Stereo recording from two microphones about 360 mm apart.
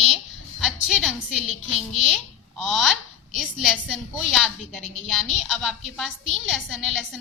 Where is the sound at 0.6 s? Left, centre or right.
Centre.